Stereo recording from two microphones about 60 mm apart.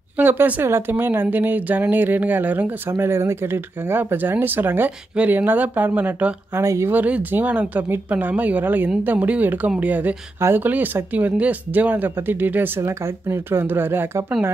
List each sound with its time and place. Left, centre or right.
0.2 s a woman's voice: right
6.5 s speech: right
6.9 s a woman's voice: right
12.8 s speech: right